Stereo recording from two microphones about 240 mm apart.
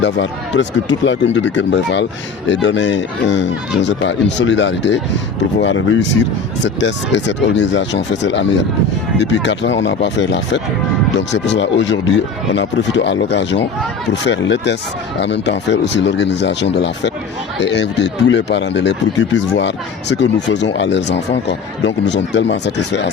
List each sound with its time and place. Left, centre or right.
0.0 s speech: left